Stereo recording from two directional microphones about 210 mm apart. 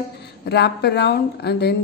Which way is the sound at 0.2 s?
50° left (ahead or behind).